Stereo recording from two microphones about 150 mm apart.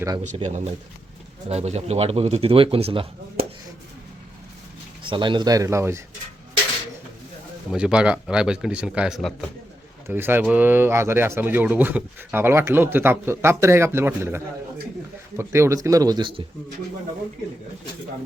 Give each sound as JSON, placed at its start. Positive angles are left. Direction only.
{"t": 0.4, "sound": "a man's voice", "side_deg": -50}
{"t": 5.0, "sound": "speech", "side_deg": -30}
{"t": 7.7, "sound": "speech", "side_deg": -5}
{"t": 10.1, "sound": "speech", "side_deg": -15}